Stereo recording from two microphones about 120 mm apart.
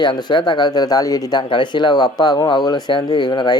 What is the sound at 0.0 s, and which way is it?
Speech, 40° left (ahead or behind).